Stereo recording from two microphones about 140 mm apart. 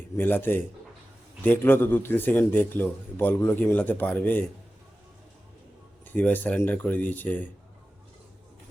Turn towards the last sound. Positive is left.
turn(degrees=10)  # may be behind; listen again after turning